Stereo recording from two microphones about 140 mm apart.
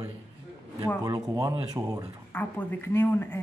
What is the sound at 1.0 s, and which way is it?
Speech, 25° right (ahead or behind).